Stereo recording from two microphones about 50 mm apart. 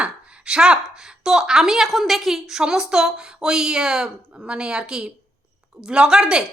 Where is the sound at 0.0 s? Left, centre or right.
Centre.